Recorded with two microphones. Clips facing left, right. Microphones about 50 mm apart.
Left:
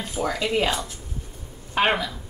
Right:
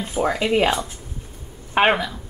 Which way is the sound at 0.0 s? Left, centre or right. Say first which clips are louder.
Right 4 dB; right.